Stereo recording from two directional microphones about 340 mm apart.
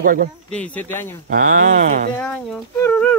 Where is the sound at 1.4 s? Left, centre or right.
Right.